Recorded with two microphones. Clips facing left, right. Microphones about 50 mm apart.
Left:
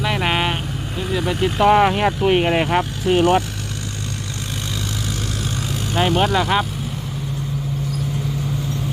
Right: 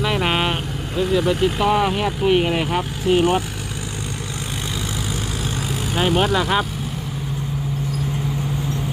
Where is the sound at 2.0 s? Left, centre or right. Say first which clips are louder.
Left 1 dB; left.